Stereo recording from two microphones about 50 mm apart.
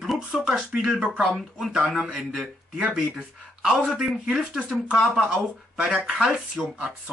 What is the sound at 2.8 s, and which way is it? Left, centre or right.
Speech, centre.